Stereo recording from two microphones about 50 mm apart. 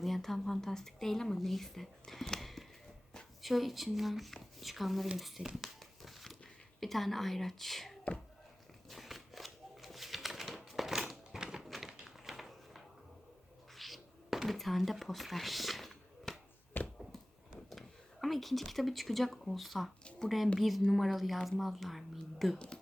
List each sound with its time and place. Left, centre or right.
0.0 s speech: centre
5.5 s crumpling: centre
6.7 s speech: centre
8.9 s a sound: centre
16.7 s a sound: left
17.7 s speech: centre
20.2 s a woman's voice: centre
20.6 s speech: centre
22.5 s speech: left